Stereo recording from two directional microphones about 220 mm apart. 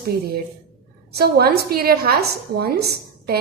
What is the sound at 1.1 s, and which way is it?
A woman's voice, 45° right (ahead or behind).